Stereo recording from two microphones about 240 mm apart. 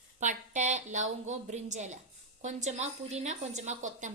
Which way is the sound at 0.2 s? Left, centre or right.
Right.